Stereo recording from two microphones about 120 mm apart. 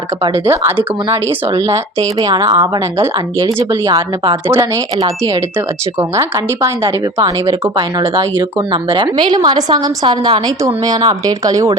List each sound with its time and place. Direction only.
0.3 s a woman's voice: 20° right (ahead or behind); by 4.4 s 40° right (ahead or behind)
4.4 s speech: 25° right (ahead or behind)
7.8 s a woman's voice: 40° right (ahead or behind)